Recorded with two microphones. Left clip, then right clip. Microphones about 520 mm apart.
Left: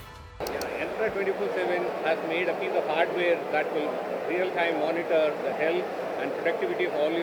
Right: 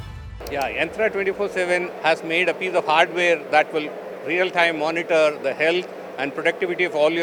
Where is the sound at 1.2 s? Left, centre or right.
Right.